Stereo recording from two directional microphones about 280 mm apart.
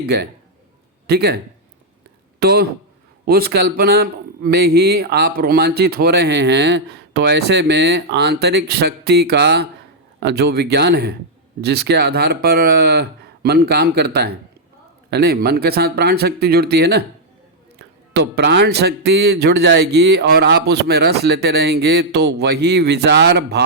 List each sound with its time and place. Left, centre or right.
1.0 s speech: right
2.4 s speech: right